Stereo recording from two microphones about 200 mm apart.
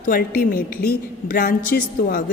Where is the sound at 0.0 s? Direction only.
45° left (ahead or behind).